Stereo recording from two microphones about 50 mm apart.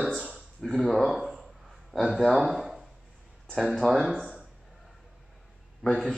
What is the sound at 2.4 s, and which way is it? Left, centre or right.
Speech, centre.